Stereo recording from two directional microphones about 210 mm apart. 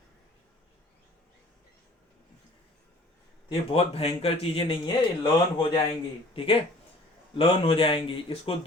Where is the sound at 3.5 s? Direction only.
25° left (ahead or behind).